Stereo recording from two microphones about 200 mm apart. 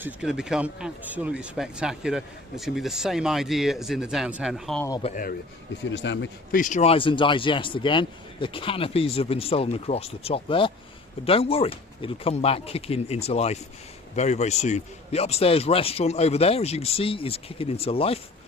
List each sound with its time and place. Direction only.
0.0 s speech: 5° right (ahead or behind)
5.0 s a man's voice: 40° left (ahead or behind)
5.9 s a man's voice: 60° left (ahead or behind)
6.6 s a man's voice: 35° left (ahead or behind)